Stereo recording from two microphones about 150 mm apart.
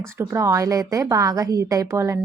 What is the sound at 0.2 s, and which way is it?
A woman's voice, 20° right (ahead or behind).